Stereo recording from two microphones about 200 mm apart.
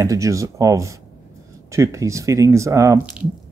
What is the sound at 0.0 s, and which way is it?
Speech, 15° right (ahead or behind).